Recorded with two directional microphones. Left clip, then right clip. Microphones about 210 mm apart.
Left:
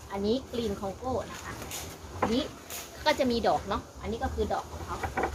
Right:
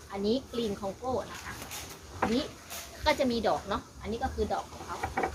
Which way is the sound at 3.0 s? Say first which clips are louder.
Left 1 dB; 15° left (ahead or behind).